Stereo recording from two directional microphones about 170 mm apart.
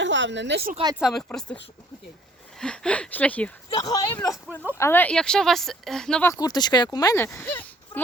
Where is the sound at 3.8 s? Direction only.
20° left (ahead or behind); by 6.3 s 5° left (ahead or behind).